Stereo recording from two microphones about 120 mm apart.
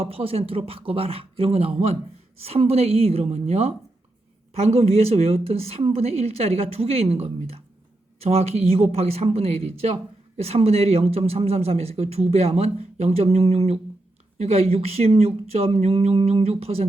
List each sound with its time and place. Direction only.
0.0 s speech: 55° right (ahead or behind)